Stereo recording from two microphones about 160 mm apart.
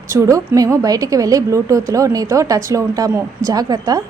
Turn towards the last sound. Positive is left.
turn(degrees=-25)  # may be behind; listen again after turning